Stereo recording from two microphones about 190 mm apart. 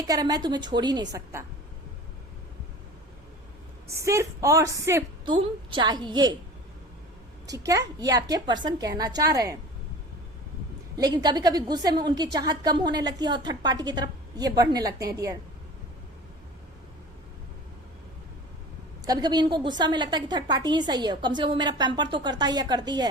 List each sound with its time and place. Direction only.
0.1 s a woman's voice: 20° right (ahead or behind)
3.8 s a woman's voice: 15° right (ahead or behind)
7.4 s a woman's voice: 20° right (ahead or behind)
10.9 s a woman's voice: 20° right (ahead or behind)
19.0 s a woman's voice: 20° right (ahead or behind)